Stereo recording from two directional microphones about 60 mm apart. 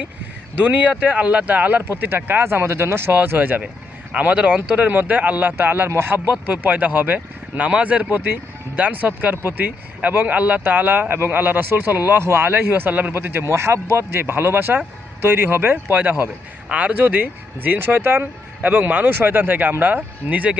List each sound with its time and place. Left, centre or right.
0.5 s speech: right
3.3 s speech: right
9.3 s speech: right
12.2 s speech: right
16.6 s speech: right
18.6 s speech: right